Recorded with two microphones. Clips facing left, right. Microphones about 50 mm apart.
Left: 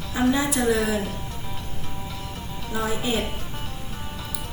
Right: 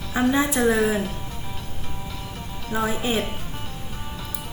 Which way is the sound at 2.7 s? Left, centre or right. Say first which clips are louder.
Right 3 dB; right.